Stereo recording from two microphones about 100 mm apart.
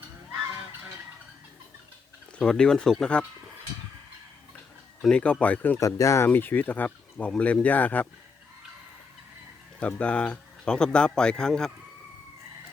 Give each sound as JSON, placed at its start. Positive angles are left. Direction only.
{"t": 2.4, "sound": "speech", "side_deg": 10}
{"t": 5.0, "sound": "speech", "side_deg": 10}
{"t": 5.8, "sound": "speech", "side_deg": 30}
{"t": 9.8, "sound": "speech", "side_deg": 10}